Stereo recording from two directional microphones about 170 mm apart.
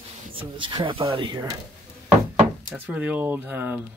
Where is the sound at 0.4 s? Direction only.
30° right (ahead or behind).